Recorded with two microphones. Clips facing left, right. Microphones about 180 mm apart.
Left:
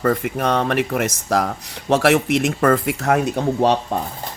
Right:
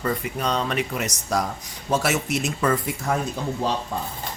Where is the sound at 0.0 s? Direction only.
55° left (ahead or behind).